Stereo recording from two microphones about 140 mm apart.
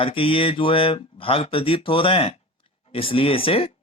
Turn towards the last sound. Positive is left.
turn(degrees=40)  # may be behind; listen again after turning